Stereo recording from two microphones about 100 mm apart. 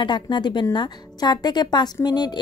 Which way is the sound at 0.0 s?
50° left (ahead or behind).